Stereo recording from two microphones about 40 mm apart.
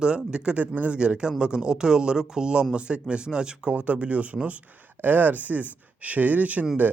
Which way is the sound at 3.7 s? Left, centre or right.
Right.